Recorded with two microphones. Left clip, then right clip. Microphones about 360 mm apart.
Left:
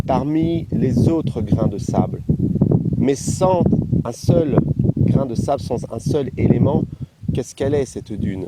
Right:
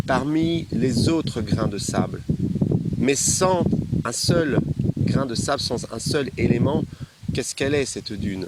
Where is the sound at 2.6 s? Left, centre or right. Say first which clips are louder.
Left 6 dB; left.